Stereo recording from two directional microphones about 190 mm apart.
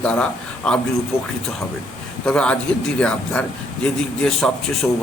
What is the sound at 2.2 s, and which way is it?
A man's voice, 5° left (ahead or behind).